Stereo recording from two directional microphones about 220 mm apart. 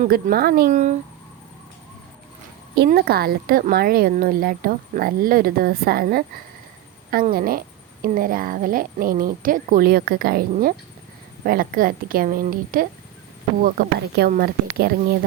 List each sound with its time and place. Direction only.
0.0 s a woman's voice: 40° right (ahead or behind)
2.7 s a woman's voice: 45° right (ahead or behind)